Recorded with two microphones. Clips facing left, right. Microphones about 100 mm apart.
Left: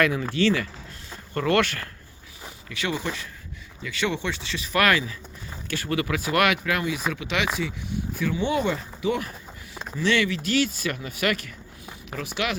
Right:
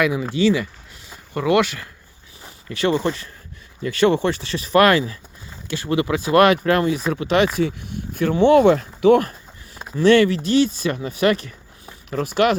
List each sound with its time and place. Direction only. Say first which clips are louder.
0.0 s speech: right 4 dB; 15° right (ahead or behind)
2.6 s speech: right 9 dB; 40° right (ahead or behind); by 9.3 s 60° right (ahead or behind)
10.0 s speech: right 10 dB; 45° right (ahead or behind)
10.4 s speech: right 6 dB; 25° right (ahead or behind)
12.1 s speech: right 11 dB; 45° right (ahead or behind)